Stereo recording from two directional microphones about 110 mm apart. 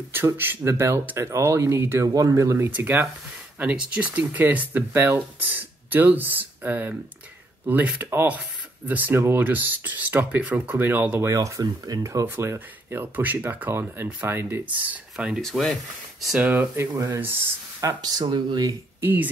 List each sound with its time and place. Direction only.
0.1 s speech: 20° right (ahead or behind)
15.4 s speech: 5° left (ahead or behind)
16.7 s speech: 25° right (ahead or behind)
17.8 s speech: 35° right (ahead or behind)
18.9 s speech: 20° right (ahead or behind)